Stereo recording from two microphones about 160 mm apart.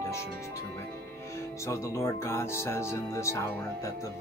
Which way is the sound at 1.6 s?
15° left (ahead or behind).